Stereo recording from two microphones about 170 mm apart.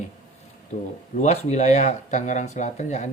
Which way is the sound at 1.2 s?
40° left (ahead or behind).